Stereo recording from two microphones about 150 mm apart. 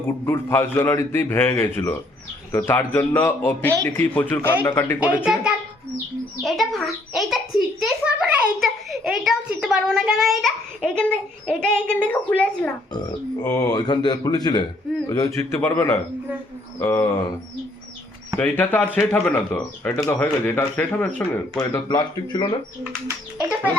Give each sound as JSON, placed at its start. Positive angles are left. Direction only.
{"t": 0.0, "sound": "speech", "side_deg": 15}
{"t": 5.2, "sound": "a child's voice", "side_deg": -5}
{"t": 13.4, "sound": "speech", "side_deg": 20}
{"t": 18.3, "sound": "speech", "side_deg": 10}
{"t": 21.8, "sound": "speech", "side_deg": 30}